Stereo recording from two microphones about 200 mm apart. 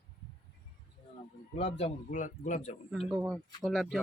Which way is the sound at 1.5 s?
30° left (ahead or behind).